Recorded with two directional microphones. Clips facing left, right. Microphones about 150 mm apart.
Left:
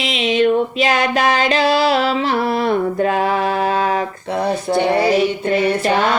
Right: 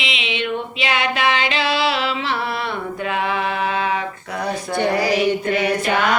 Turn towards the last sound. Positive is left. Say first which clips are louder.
# left 3 dB
turn(degrees=30)  # may be behind; listen again after turning